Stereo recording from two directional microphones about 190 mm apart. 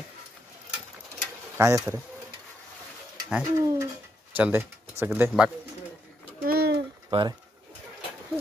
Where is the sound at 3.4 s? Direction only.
15° right (ahead or behind).